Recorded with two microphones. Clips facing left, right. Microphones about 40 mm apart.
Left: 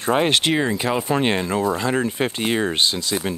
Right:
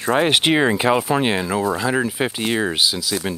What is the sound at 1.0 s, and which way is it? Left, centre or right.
Speech, centre.